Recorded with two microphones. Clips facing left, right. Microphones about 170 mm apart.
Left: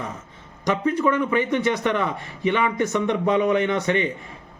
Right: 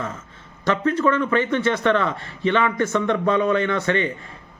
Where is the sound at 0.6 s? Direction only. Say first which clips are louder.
Right 1 dB; 15° left (ahead or behind).